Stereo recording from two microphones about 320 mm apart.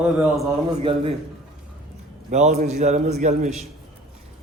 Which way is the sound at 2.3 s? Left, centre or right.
Right.